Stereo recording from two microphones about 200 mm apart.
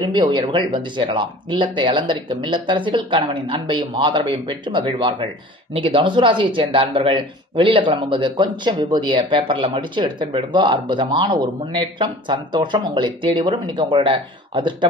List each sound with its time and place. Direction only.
0.0 s speech: 25° right (ahead or behind)